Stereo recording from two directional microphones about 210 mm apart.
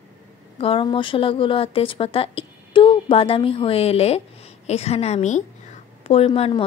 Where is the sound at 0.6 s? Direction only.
25° left (ahead or behind).